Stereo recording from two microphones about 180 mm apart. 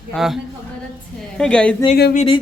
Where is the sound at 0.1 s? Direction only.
Centre (ahead or behind).